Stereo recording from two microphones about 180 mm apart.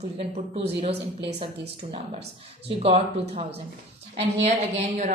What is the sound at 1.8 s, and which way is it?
A woman's voice, 35° right (ahead or behind).